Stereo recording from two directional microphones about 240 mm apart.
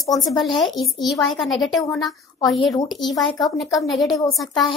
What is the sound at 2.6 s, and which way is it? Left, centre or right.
Speech, centre.